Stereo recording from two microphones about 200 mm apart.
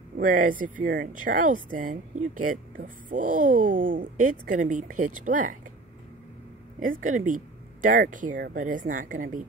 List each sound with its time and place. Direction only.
0.2 s speech: 40° right (ahead or behind)
6.8 s speech: 40° right (ahead or behind)